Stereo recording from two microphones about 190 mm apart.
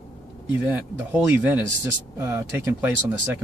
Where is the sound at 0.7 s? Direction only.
10° right (ahead or behind).